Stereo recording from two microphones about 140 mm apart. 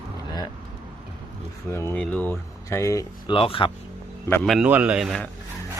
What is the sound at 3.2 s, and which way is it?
Speech, 40° left (ahead or behind).